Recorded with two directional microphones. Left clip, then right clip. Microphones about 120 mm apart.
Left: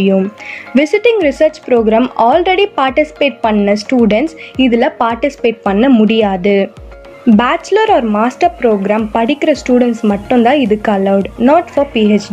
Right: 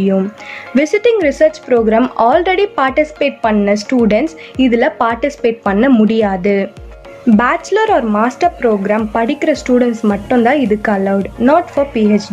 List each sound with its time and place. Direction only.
0.7 s speech: 20° left (ahead or behind)